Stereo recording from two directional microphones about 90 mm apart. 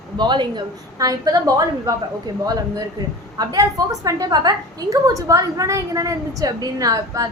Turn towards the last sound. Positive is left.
turn(degrees=-40)  # may be behind; listen again after turning